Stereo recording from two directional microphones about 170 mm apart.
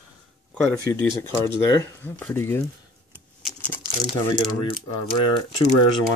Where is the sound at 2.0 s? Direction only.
15° left (ahead or behind).